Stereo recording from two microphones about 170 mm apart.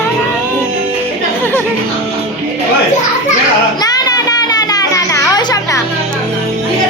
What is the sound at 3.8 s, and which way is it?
Children playing, 25° left (ahead or behind).